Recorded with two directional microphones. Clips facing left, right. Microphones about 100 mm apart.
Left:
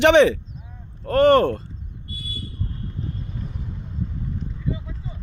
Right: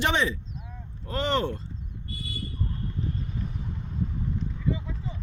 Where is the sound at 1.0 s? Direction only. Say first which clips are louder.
Left 12 dB; 55° left (ahead or behind).